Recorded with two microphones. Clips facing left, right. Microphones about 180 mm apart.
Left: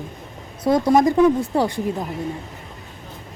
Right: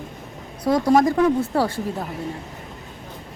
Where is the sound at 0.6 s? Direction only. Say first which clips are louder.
Left 1 dB; 20° left (ahead or behind).